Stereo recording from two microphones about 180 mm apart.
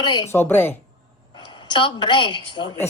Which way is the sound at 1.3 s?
25° left (ahead or behind).